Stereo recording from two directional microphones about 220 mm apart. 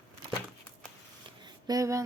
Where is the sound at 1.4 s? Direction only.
15° right (ahead or behind).